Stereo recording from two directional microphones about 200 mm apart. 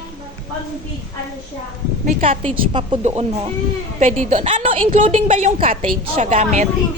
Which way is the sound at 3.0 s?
35° right (ahead or behind).